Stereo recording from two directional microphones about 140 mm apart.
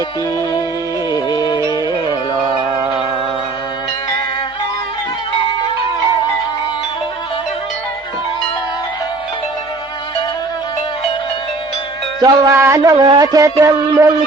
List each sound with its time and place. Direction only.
1.1 s music: 30° left (ahead or behind)
12.2 s a man's voice: 20° right (ahead or behind)
12.8 s a man's voice: 30° right (ahead or behind)